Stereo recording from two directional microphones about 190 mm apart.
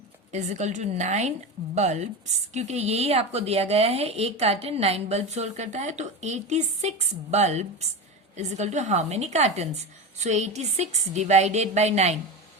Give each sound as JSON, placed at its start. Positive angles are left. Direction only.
{"t": 0.3, "sound": "speech", "side_deg": -40}